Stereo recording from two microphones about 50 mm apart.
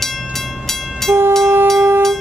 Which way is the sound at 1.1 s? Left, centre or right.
Right.